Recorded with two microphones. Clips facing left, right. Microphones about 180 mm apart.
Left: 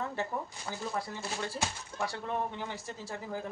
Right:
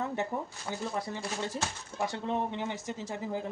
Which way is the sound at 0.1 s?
20° right (ahead or behind).